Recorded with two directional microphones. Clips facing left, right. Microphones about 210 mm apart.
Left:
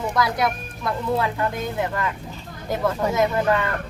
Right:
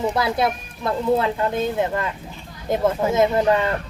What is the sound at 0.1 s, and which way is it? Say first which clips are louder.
Speech: right 1 dB; 25° right (ahead or behind).